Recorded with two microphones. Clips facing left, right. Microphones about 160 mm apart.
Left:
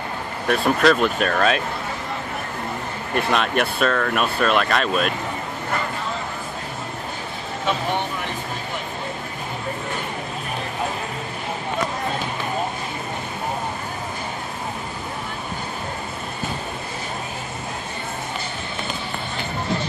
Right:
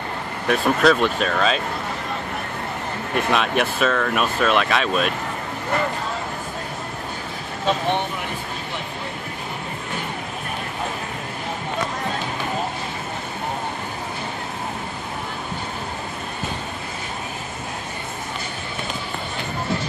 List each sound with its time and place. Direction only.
0.5 s speech: centre (ahead or behind)
3.2 s speech: centre (ahead or behind)